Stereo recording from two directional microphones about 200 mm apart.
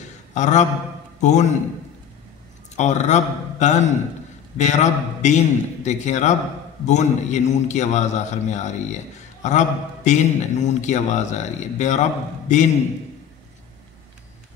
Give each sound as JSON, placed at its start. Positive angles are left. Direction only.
{"t": 0.3, "sound": "a man's voice", "side_deg": 35}
{"t": 2.8, "sound": "a man's voice", "side_deg": 35}